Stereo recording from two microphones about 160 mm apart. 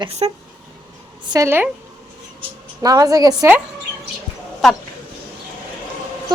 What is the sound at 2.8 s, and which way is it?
Speech, 20° right (ahead or behind).